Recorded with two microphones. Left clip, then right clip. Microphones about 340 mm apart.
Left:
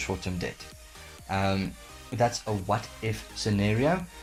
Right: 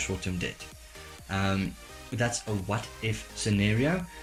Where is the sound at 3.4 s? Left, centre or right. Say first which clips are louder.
Left 1 dB; centre.